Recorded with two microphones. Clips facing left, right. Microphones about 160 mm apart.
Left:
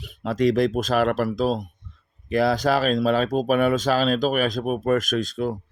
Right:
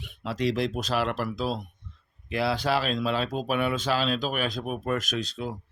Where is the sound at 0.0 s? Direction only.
40° left (ahead or behind).